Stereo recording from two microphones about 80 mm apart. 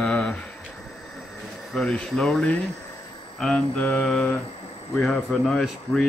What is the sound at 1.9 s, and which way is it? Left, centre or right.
A man's voice, centre.